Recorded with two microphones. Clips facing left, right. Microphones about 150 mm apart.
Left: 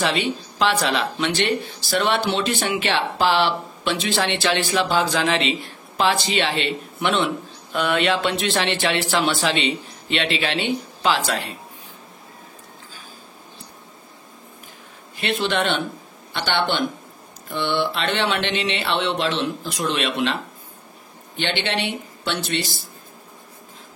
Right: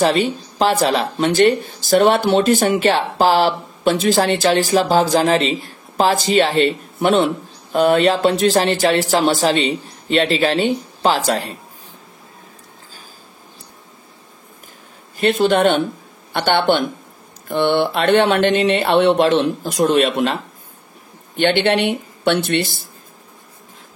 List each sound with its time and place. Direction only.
0.0 s speech: 40° right (ahead or behind)
15.1 s speech: 45° right (ahead or behind)
21.4 s speech: 55° right (ahead or behind)